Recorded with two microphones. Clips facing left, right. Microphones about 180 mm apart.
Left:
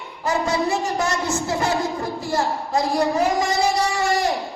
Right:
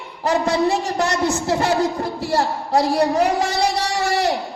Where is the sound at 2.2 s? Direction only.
65° right (ahead or behind).